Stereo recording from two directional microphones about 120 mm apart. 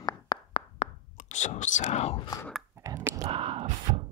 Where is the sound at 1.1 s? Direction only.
80° left; by 2.2 s 60° left (ahead or behind).